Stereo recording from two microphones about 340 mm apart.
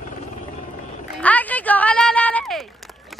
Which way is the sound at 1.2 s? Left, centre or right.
Centre.